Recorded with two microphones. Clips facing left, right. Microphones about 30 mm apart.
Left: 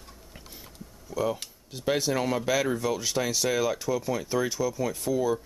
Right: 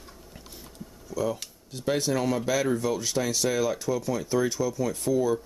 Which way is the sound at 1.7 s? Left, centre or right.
Centre.